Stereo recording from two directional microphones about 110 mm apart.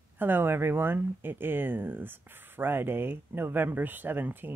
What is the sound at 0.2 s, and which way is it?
Speech, 20° right (ahead or behind).